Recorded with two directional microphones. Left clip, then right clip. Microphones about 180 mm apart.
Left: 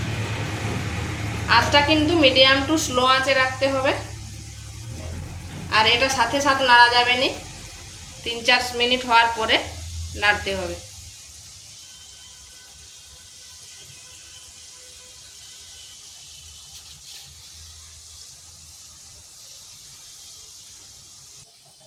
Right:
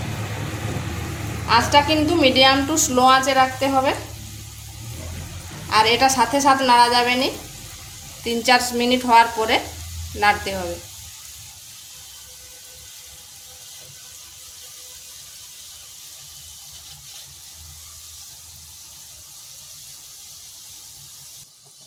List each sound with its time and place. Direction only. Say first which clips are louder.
1.5 s a woman's voice: right 1 dB; 65° right (ahead or behind)
5.6 s a woman's voice: right 2 dB; 65° right (ahead or behind)